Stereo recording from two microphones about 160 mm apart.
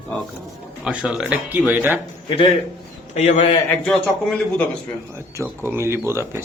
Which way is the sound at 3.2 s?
45° left (ahead or behind).